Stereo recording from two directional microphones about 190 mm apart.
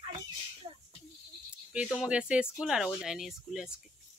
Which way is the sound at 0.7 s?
25° right (ahead or behind).